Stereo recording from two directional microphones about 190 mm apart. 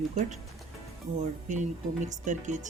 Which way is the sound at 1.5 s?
40° right (ahead or behind).